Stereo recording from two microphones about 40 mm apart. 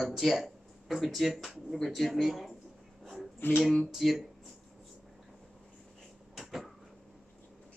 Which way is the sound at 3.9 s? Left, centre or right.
Centre.